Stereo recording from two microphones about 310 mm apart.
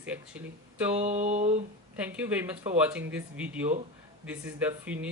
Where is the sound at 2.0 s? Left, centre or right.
Centre.